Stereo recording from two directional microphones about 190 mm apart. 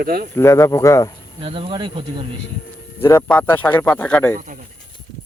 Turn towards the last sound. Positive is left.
turn(degrees=-40)  # may be behind; listen again after turning